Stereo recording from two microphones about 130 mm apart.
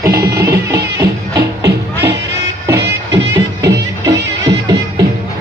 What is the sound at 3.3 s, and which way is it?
Music, 25° right (ahead or behind).